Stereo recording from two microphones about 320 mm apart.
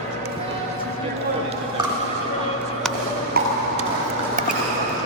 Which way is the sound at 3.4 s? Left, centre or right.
Right.